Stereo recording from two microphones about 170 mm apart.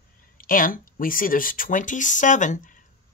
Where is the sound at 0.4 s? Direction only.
55° left (ahead or behind).